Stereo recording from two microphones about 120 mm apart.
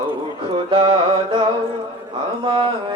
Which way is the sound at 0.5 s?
45° right (ahead or behind).